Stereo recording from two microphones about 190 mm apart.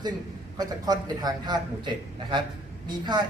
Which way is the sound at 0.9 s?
20° right (ahead or behind).